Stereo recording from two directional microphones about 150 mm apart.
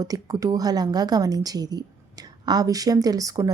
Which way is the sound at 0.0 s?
25° right (ahead or behind).